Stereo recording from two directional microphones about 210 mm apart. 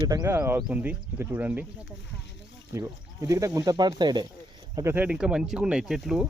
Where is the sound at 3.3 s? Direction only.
15° right (ahead or behind).